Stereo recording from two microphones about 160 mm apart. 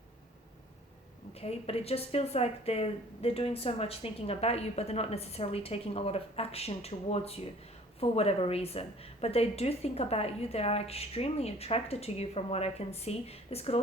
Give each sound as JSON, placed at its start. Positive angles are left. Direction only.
{"t": 1.3, "sound": "a woman's voice", "side_deg": 40}